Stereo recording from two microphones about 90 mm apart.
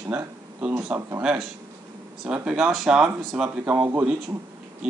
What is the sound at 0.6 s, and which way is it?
Speech, 15° right (ahead or behind).